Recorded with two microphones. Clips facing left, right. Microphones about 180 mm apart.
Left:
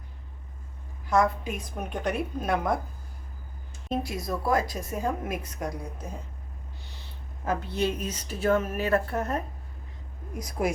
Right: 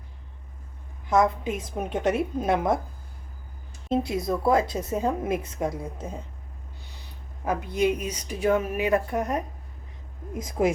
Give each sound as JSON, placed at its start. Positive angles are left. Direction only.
{"t": 1.1, "sound": "a woman's voice", "side_deg": -20}
{"t": 3.8, "sound": "a woman's voice", "side_deg": -25}
{"t": 7.4, "sound": "a woman's voice", "side_deg": -10}